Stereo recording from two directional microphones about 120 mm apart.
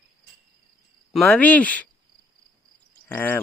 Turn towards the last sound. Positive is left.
turn(degrees=15)  # may be behind; listen again after turning